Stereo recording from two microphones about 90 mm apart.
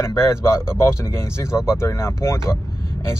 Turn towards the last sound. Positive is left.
turn(degrees=30)  # may be behind; listen again after turning